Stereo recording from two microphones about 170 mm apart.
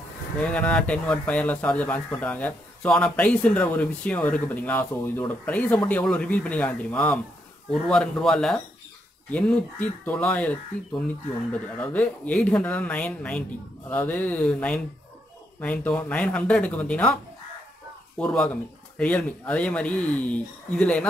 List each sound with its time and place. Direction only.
0.4 s speech: 5° left (ahead or behind)